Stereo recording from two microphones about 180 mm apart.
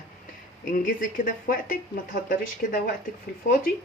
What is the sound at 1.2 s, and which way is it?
Speech, 50° left (ahead or behind).